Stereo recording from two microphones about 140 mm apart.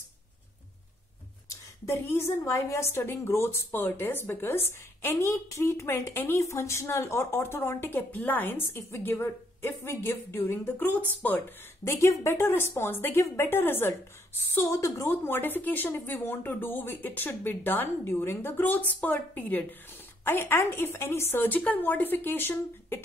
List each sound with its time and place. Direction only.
1.9 s a woman's voice: 20° left (ahead or behind)